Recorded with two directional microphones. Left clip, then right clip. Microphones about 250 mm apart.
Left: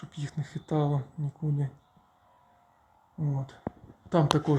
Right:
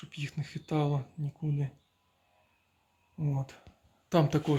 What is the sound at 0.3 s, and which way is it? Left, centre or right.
Speech, centre.